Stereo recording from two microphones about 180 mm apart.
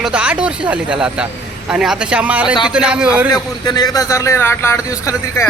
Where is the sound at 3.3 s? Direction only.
20° left (ahead or behind).